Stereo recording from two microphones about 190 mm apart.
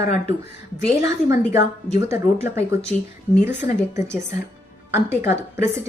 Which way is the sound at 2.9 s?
5° left (ahead or behind).